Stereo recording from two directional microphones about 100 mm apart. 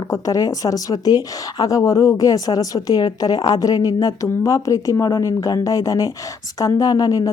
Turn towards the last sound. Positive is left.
turn(degrees=35)  # may be behind; listen again after turning